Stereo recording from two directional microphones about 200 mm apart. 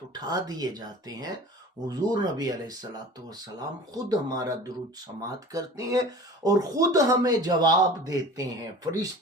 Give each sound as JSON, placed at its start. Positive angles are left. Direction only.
{"t": 0.1, "sound": "speech", "side_deg": -20}
{"t": 3.9, "sound": "speech", "side_deg": -15}